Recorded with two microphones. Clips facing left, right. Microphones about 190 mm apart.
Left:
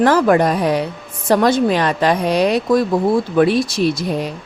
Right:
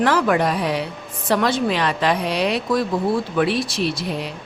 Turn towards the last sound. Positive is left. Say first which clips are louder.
# left 6 dB
turn(degrees=45)  # may be behind; listen again after turning